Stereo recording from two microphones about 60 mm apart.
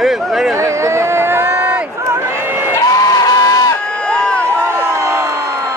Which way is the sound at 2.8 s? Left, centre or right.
Left.